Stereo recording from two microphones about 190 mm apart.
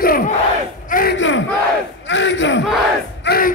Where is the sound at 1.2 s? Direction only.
80° left.